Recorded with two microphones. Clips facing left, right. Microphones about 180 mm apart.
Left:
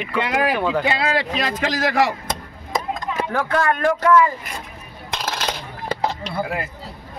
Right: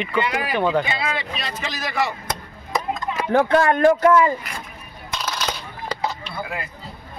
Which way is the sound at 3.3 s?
25° right (ahead or behind).